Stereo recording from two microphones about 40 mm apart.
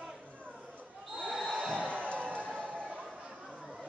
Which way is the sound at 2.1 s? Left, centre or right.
Right.